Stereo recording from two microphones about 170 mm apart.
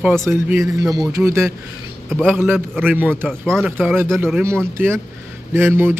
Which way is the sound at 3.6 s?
10° right (ahead or behind).